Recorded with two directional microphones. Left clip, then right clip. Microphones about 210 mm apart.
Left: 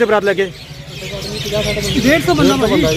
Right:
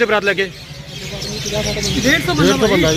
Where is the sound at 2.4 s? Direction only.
35° right (ahead or behind).